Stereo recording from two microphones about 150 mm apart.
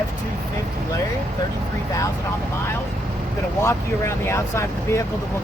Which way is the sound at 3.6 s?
20° left (ahead or behind).